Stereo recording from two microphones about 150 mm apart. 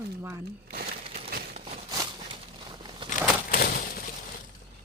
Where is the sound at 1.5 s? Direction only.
50° right (ahead or behind).